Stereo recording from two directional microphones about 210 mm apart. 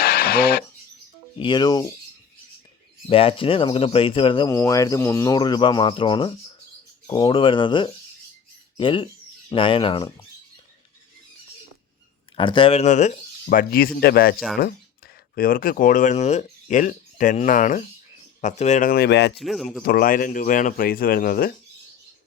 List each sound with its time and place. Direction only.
0.0 s a sound: 45° left (ahead or behind)
1.4 s speech: 20° left (ahead or behind)
3.1 s speech: 25° left (ahead or behind)
12.4 s speech: 25° left (ahead or behind); by 19.4 s 55° left (ahead or behind)
19.4 s speech: centre (ahead or behind)
19.8 s a man's voice: 45° left (ahead or behind)